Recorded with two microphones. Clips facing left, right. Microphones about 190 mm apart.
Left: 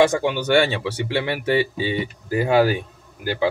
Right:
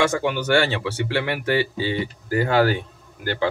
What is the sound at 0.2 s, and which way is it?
Speech, 15° left (ahead or behind).